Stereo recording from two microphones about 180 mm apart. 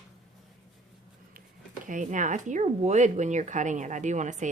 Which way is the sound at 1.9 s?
45° right (ahead or behind).